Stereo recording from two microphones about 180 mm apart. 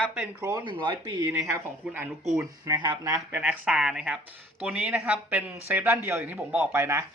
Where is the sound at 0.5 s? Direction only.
25° right (ahead or behind).